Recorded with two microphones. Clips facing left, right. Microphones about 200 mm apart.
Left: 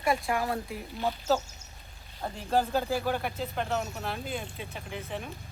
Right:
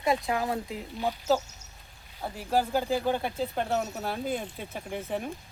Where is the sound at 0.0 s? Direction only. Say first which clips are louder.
Right 1 dB; 20° right (ahead or behind).